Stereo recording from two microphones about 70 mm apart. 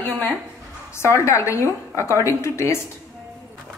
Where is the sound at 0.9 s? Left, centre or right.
Left.